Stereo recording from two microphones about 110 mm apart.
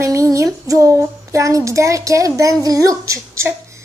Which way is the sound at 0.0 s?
30° right (ahead or behind).